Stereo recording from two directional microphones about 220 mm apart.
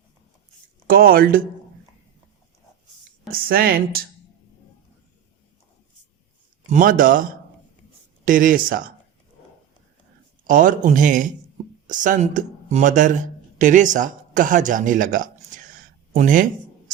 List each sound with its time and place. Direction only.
0.9 s speech: 40° right (ahead or behind)
3.3 s speech: 40° right (ahead or behind)
6.7 s speech: 35° right (ahead or behind)
10.4 s speech: 35° right (ahead or behind)